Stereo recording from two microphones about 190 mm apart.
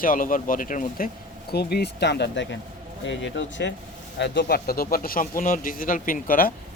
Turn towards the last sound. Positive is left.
turn(degrees=50)  # may be behind; listen again after turning